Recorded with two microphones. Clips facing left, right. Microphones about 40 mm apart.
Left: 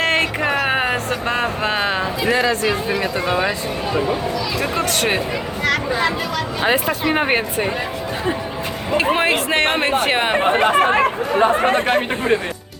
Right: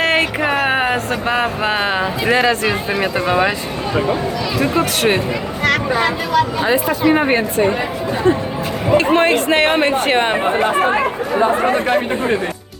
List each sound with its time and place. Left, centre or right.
0.0 s a sound: centre
2.3 s speech: right
4.6 s speech: centre
5.6 s a sound: right
6.8 s speech: centre
7.2 s speech: left
9.1 s speech: centre
10.4 s speech: left